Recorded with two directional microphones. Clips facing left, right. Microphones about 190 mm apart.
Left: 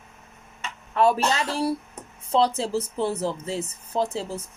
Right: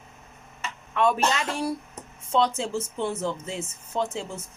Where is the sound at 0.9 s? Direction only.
35° left (ahead or behind).